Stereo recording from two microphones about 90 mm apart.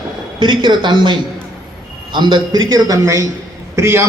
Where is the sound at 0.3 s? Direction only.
60° right (ahead or behind).